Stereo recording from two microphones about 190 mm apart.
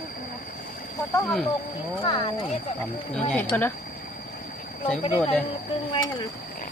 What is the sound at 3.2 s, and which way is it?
Speech, 10° left (ahead or behind).